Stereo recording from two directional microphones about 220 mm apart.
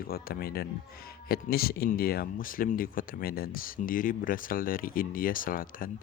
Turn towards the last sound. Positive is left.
turn(degrees=40)  # may be behind; listen again after turning